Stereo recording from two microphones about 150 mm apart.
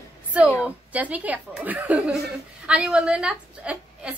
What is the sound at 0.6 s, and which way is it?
A woman's voice, 10° right (ahead or behind).